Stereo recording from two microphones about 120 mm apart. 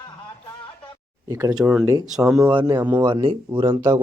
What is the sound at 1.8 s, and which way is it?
Speech, 30° right (ahead or behind).